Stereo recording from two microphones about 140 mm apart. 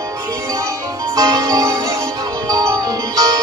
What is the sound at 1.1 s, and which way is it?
Music, 25° right (ahead or behind).